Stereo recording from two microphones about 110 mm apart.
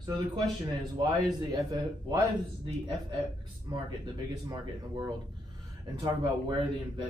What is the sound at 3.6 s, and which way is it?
Speech, 45° right (ahead or behind).